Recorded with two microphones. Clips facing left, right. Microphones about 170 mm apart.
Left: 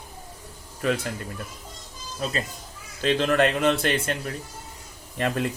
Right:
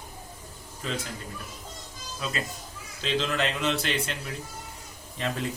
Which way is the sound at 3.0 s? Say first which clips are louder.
Left 7 dB; 55° left (ahead or behind).